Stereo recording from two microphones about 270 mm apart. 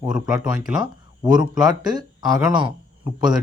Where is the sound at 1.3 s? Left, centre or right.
Centre.